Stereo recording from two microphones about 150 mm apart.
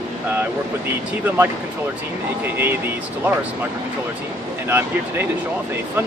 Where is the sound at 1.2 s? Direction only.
15° right (ahead or behind).